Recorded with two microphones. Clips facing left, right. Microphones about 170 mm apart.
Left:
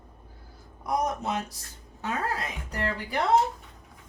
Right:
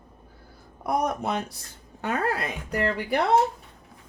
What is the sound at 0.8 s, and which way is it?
Speech, 60° right (ahead or behind).